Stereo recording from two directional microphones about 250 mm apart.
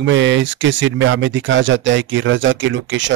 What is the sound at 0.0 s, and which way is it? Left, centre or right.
Speech, right.